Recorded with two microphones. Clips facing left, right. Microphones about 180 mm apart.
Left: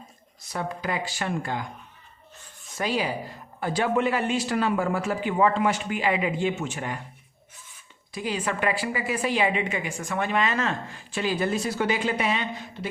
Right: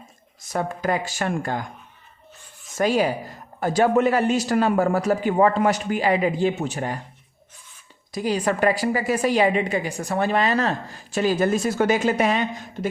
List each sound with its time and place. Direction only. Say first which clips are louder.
0.4 s speech: right 6 dB; 45° right (ahead or behind)
2.7 s a woman's voice: right 6 dB; 45° right (ahead or behind)
8.1 s a woman's voice: right 6 dB; 40° right (ahead or behind)